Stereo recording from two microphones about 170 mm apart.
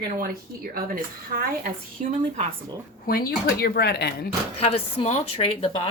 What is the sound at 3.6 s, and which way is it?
Speech, 70° left (ahead or behind).